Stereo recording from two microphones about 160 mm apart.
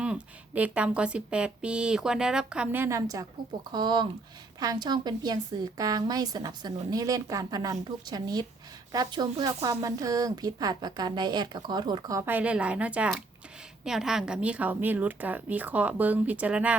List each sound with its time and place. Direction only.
0.0 s a woman's voice: 5° right (ahead or behind)